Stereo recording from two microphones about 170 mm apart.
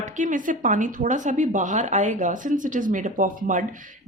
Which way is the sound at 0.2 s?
50° right (ahead or behind).